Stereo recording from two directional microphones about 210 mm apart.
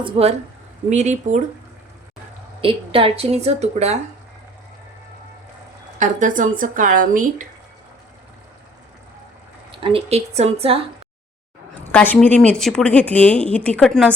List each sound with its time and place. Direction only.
0.0 s speech: 30° right (ahead or behind)
2.6 s speech: 25° right (ahead or behind)
6.0 s speech: 40° right (ahead or behind)
9.8 s speech: 30° right (ahead or behind)
11.7 s a woman's voice: 10° left (ahead or behind)